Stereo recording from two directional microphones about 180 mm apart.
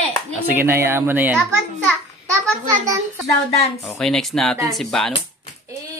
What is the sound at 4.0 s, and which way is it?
Speech, centre (ahead or behind).